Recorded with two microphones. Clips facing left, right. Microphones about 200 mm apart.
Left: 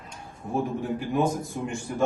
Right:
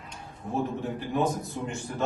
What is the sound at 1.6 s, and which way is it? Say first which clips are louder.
Speech: left 2 dB; 5° left (ahead or behind).